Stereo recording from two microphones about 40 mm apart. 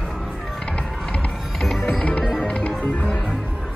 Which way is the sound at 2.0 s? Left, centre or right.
Left.